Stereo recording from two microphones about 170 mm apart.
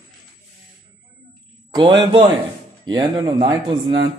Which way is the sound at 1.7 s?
25° right (ahead or behind).